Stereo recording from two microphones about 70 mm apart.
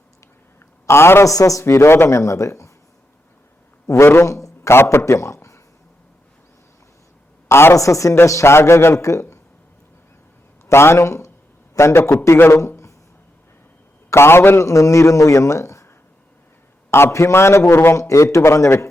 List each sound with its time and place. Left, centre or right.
0.9 s a man's voice: left
1.2 s a man's voice: left
1.6 s a man's voice: left
3.8 s a man's voice: left
4.8 s speech: left
7.4 s a woman's voice: left
7.8 s a man's voice: left
10.7 s a man's voice: left
14.1 s a man's voice: left
16.9 s a man's voice: left